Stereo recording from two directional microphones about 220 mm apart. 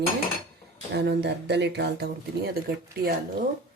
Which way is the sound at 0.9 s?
50° right (ahead or behind).